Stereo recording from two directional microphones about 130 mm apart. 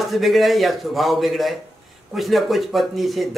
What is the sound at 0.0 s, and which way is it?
Speech, centre (ahead or behind).